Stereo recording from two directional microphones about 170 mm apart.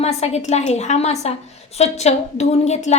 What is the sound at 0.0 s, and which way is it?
A woman's voice, 40° left (ahead or behind).